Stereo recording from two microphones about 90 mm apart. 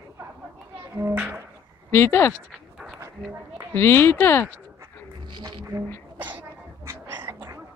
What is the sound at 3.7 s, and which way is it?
Speech, 25° left (ahead or behind).